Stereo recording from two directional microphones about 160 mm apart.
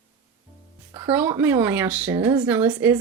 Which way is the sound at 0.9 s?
10° right (ahead or behind).